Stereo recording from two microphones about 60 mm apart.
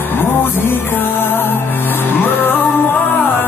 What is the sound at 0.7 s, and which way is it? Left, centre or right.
Music, left.